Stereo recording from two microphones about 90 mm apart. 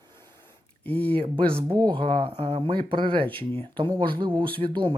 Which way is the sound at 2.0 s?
90° right.